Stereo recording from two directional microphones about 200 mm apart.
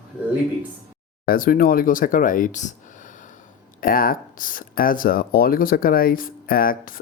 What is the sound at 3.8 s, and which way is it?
Speech, 45° left (ahead or behind).